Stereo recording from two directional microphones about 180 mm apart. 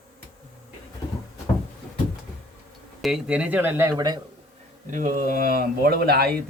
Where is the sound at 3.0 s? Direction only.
5° right (ahead or behind); by 4.2 s 20° right (ahead or behind).